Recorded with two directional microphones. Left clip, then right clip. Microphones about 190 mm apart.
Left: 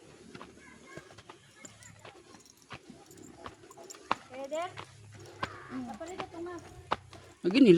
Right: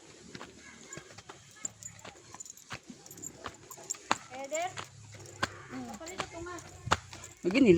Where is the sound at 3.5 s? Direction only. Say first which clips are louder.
Right 3 dB; 65° right (ahead or behind).